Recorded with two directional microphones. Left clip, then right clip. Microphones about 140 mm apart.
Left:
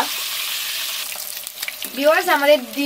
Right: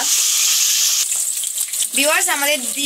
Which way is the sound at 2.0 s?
10° right (ahead or behind).